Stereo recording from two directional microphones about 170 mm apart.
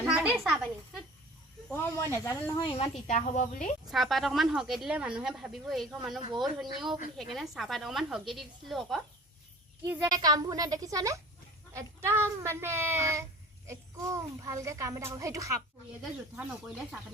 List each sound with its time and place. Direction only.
0.0 s a sound: 10° right (ahead or behind)
1.7 s speech: 15° left (ahead or behind)
2.6 s a woman's voice: 35° left (ahead or behind)
3.9 s a woman's voice: centre (ahead or behind)
9.8 s a woman's voice: 15° right (ahead or behind)
16.0 s a woman's voice: 5° right (ahead or behind)